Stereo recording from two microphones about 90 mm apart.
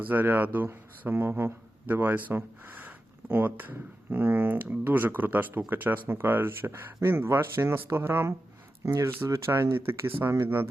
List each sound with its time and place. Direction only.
0.0 s speech: 20° right (ahead or behind)